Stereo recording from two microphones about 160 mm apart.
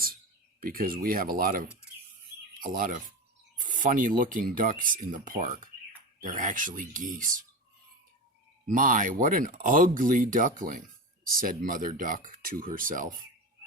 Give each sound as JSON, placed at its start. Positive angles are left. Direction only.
{"t": 0.6, "sound": "speech", "side_deg": -60}
{"t": 2.7, "sound": "speech", "side_deg": -55}
{"t": 8.6, "sound": "speech", "side_deg": -55}